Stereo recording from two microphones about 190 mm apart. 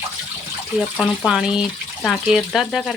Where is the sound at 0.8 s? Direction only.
Centre (ahead or behind).